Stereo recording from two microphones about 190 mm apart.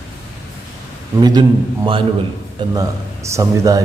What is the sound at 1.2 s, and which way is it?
Speech, 20° right (ahead or behind).